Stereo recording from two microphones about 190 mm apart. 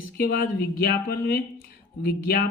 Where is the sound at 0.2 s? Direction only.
50° left (ahead or behind).